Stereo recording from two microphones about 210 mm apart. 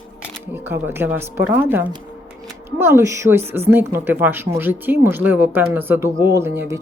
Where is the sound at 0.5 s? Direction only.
10° right (ahead or behind).